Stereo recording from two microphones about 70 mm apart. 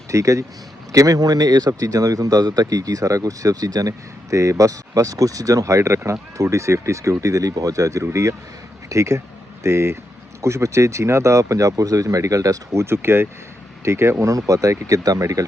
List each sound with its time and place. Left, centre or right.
0.1 s speech: right
12.8 s speech: right
14.3 s speech: right